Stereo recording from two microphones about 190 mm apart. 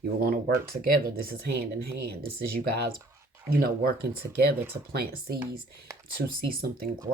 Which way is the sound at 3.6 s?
55° right (ahead or behind).